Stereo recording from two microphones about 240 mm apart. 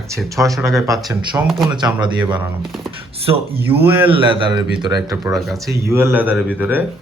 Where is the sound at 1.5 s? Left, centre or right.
Centre.